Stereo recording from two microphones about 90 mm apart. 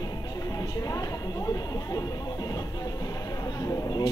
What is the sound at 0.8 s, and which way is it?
Speech, 40° left (ahead or behind).